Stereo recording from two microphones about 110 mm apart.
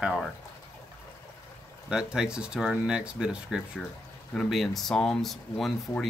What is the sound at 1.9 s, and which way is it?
Speech, 5° right (ahead or behind).